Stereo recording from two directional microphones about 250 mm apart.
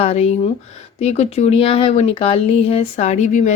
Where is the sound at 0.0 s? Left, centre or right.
Left.